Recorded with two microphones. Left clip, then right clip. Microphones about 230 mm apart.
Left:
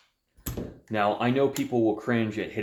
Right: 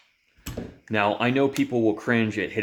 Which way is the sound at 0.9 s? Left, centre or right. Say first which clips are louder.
Right 2 dB; right.